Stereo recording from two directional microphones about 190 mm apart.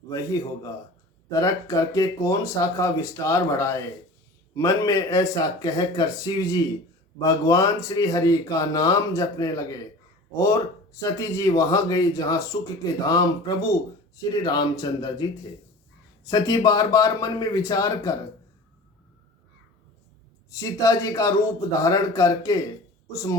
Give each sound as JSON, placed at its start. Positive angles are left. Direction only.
{"t": 0.1, "sound": "speech", "side_deg": 15}
{"t": 11.0, "sound": "speech", "side_deg": 15}
{"t": 20.5, "sound": "speech", "side_deg": 15}